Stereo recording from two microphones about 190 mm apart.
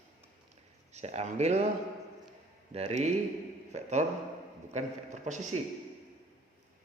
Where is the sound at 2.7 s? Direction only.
35° right (ahead or behind).